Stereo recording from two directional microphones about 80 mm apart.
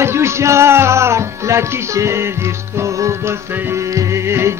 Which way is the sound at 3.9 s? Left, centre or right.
Right.